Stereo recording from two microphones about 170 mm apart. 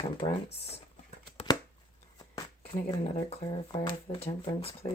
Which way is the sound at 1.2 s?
30° left (ahead or behind).